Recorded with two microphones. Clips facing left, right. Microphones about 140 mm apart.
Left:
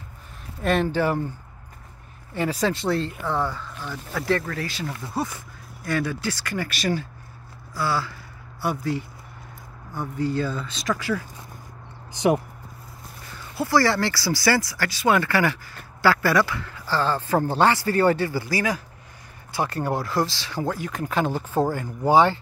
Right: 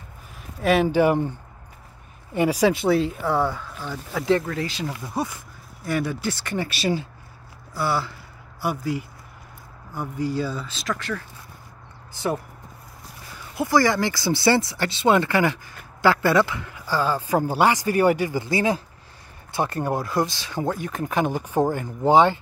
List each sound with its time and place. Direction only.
0.6 s speech: 5° right (ahead or behind)
2.3 s speech: 15° right (ahead or behind); by 11.2 s 5° left (ahead or behind)
12.1 s speech: 15° left (ahead or behind)
13.6 s speech: 15° right (ahead or behind)